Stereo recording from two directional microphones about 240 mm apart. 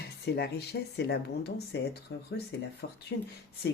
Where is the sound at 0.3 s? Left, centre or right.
Left.